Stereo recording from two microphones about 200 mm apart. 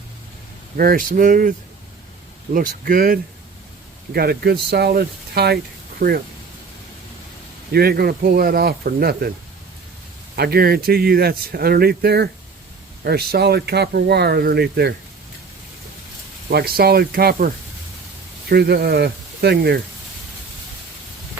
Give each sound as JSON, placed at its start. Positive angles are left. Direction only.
{"t": 0.8, "sound": "speech", "side_deg": -45}
{"t": 7.7, "sound": "speech", "side_deg": -50}
{"t": 10.3, "sound": "speech", "side_deg": -50}
{"t": 16.5, "sound": "speech", "side_deg": -50}